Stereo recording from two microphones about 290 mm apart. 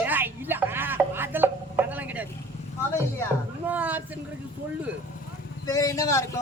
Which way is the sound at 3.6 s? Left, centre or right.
Centre.